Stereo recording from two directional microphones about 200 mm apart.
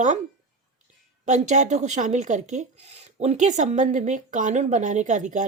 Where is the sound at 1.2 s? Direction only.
35° right (ahead or behind).